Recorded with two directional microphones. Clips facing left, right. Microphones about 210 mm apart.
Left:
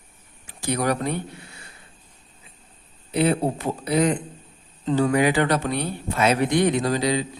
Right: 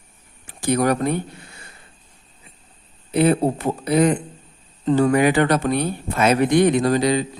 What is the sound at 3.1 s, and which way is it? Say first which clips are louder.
Speech: right 4 dB; 50° right (ahead or behind).